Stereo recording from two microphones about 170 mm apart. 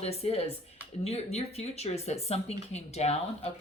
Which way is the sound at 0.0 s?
35° left (ahead or behind).